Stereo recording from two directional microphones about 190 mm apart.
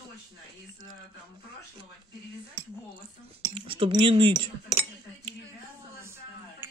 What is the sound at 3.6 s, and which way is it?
Speech, 30° right (ahead or behind).